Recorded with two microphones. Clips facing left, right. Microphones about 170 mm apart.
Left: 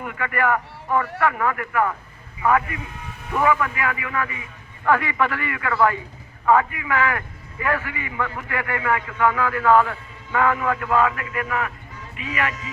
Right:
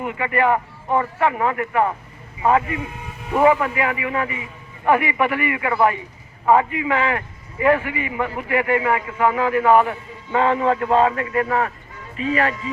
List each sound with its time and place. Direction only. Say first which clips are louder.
0.0 s a man's voice: right 4 dB; 20° right (ahead or behind)